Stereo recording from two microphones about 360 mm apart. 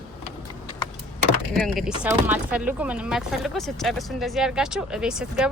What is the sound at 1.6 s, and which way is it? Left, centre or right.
Speech, centre.